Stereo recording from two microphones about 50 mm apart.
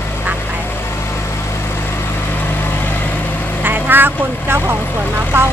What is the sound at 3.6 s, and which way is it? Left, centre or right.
Speech, right.